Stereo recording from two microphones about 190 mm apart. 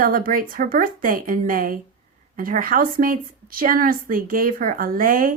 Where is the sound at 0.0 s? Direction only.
50° right (ahead or behind).